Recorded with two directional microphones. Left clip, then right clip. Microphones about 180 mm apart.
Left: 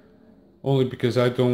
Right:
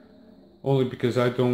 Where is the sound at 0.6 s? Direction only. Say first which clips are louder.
Left 1 dB; 20° left (ahead or behind).